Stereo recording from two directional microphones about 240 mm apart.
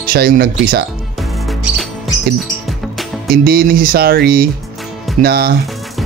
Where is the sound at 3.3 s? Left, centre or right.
Right.